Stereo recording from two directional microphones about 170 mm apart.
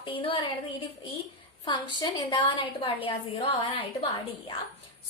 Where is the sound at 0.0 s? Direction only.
30° left (ahead or behind).